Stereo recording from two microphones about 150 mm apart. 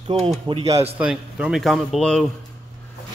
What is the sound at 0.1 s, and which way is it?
Speech, 45° right (ahead or behind).